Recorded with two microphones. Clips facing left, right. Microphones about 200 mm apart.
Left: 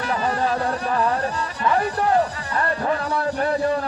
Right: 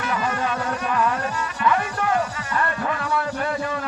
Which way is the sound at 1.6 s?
35° left (ahead or behind).